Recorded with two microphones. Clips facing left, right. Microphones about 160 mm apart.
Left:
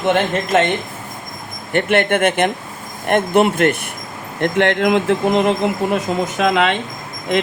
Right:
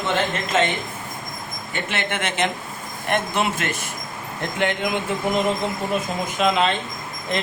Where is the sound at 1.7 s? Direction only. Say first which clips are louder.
Left 11 dB; 55° left (ahead or behind).